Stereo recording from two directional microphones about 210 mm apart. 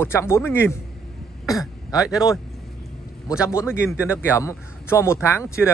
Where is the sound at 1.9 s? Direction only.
15° left (ahead or behind).